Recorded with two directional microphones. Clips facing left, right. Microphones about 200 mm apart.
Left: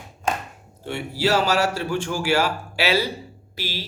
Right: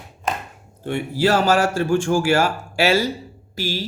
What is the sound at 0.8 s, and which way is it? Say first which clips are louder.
A man's voice: right 4 dB; 50° right (ahead or behind).